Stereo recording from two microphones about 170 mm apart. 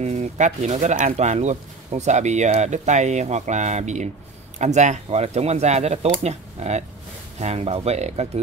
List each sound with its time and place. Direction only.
0.0 s speech: 40° right (ahead or behind)